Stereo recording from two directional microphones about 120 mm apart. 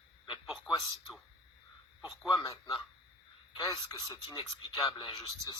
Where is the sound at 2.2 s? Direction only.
30° left (ahead or behind).